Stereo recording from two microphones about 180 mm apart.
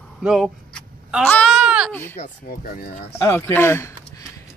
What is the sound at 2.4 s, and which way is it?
Speech, 55° left (ahead or behind).